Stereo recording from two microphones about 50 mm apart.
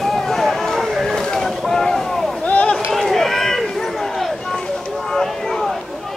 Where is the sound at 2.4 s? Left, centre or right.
Left.